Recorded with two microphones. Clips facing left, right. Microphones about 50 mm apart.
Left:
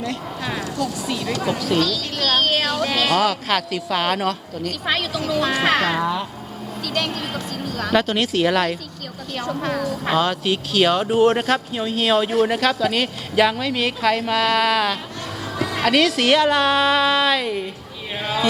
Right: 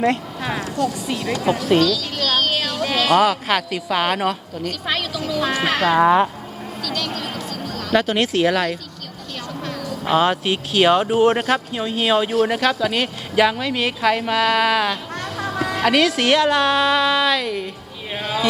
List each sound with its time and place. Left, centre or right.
1.0 s speech: centre
1.8 s speech: centre
2.7 s speech: centre
4.7 s speech: centre
5.4 s speech: centre
6.0 s speech: right
6.8 s a sound: left
7.9 s speech: centre
9.5 s a woman's voice: left
10.2 s speech: centre